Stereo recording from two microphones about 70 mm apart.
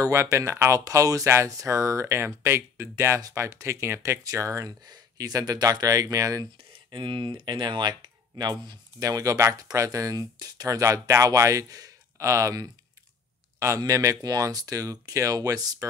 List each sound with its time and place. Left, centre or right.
0.1 s speech: right
0.7 s speech: right
4.8 s speech: right
6.9 s speech: right
9.0 s speech: right
13.7 s speech: right